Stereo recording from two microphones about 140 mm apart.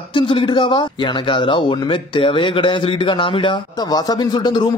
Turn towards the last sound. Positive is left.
turn(degrees=30)  # may be behind; listen again after turning